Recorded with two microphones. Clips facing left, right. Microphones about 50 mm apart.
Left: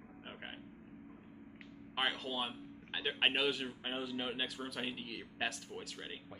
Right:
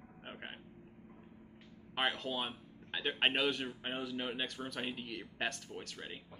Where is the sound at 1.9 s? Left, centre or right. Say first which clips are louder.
Right 1 dB; centre.